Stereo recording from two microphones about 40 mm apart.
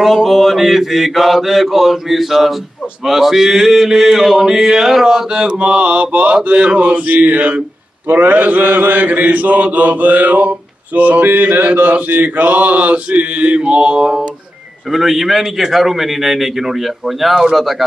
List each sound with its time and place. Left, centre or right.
0.0 s a man's voice: centre
3.1 s mantra: centre
5.8 s mantra: right
7.1 s mantra: right; by 14.2 s centre
14.9 s a man's voice: centre